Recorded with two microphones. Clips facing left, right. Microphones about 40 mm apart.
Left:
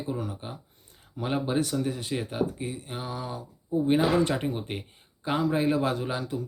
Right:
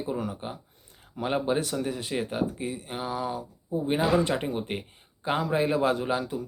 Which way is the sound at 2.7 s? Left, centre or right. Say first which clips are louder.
Right 3 dB; right.